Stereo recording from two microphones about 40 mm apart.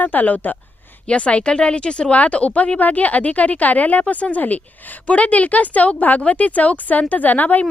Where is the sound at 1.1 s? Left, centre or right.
Left.